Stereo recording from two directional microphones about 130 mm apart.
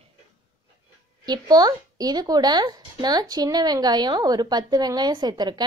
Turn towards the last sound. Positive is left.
turn(degrees=-35)  # may be behind; listen again after turning